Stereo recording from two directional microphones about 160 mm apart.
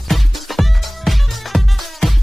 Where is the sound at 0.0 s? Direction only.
Centre (ahead or behind).